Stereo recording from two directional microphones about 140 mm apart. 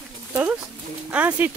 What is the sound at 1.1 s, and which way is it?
Speech, 10° right (ahead or behind).